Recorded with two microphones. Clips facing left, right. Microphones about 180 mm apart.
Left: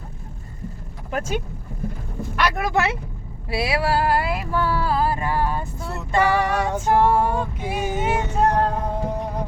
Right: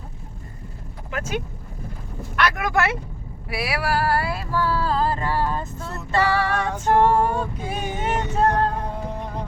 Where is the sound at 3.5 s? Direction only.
25° left (ahead or behind).